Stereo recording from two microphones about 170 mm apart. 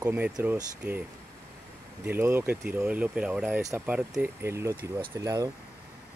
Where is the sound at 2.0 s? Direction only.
15° right (ahead or behind).